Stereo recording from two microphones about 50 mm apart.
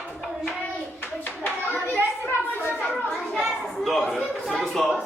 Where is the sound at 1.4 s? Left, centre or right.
Left.